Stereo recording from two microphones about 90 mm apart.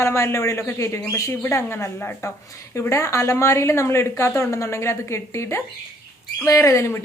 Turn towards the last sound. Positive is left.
turn(degrees=35)  # may be behind; listen again after turning